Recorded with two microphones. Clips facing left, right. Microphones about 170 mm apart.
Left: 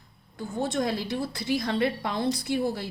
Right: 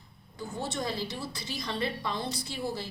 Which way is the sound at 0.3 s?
55° left (ahead or behind).